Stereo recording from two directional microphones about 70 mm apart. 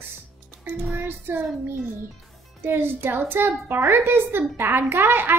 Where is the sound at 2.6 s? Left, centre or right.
Right.